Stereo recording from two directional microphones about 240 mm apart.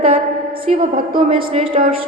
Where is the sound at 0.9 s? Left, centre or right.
Right.